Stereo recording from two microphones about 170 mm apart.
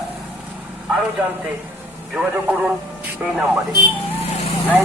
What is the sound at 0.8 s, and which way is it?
Speech, 5° right (ahead or behind).